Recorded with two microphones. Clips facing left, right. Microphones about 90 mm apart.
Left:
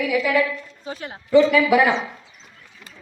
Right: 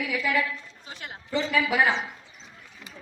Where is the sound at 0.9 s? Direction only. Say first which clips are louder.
Left 9 dB; 35° left (ahead or behind).